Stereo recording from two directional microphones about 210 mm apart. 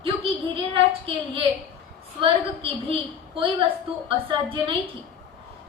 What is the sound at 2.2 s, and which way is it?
A woman's voice, 25° right (ahead or behind).